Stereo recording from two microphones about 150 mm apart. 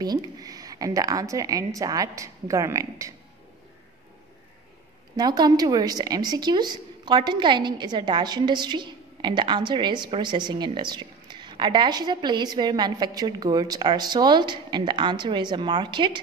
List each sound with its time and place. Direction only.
0.0 s speech: 25° right (ahead or behind)
5.1 s a woman's voice: 25° right (ahead or behind)